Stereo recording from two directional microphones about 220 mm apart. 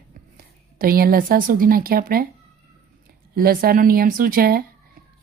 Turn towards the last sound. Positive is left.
turn(degrees=-40)  # may be behind; listen again after turning